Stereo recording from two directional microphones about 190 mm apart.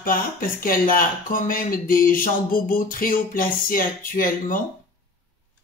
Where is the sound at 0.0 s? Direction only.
50° left (ahead or behind).